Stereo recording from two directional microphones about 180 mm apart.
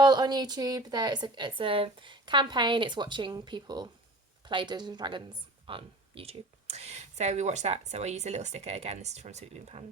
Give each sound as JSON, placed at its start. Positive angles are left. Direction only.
{"t": 0.0, "sound": "a woman's voice", "side_deg": -25}